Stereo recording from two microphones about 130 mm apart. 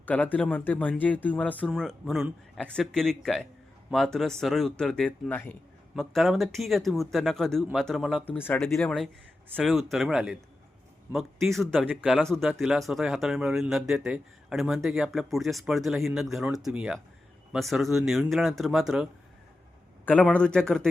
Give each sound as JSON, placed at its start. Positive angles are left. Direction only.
{"t": 0.0, "sound": "a man's voice", "side_deg": 10}
{"t": 5.3, "sound": "speech", "side_deg": 15}
{"t": 6.0, "sound": "a man's voice", "side_deg": 0}
{"t": 8.2, "sound": "a man's voice", "side_deg": 15}
{"t": 11.5, "sound": "a man's voice", "side_deg": 0}
{"t": 20.1, "sound": "speech", "side_deg": 10}